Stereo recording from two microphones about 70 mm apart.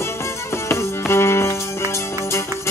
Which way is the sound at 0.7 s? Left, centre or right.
Left.